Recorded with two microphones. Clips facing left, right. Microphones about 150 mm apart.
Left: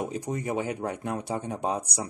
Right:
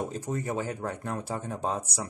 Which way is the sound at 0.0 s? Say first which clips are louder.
Left 1 dB; 15° left (ahead or behind).